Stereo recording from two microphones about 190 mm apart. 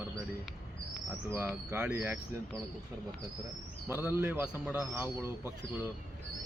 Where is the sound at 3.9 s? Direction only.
10° right (ahead or behind).